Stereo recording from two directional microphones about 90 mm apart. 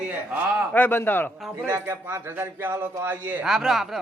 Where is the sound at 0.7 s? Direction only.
20° left (ahead or behind).